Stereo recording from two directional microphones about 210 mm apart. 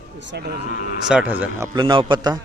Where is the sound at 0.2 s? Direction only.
60° right (ahead or behind).